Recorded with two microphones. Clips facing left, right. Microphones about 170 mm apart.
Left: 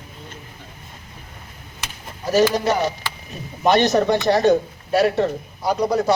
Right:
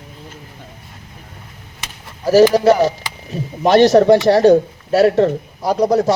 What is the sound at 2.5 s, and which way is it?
Speech, 35° right (ahead or behind).